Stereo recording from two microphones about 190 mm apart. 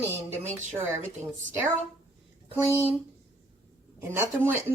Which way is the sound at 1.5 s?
10° right (ahead or behind).